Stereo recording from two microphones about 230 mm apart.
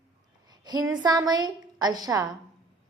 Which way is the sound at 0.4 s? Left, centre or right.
Centre.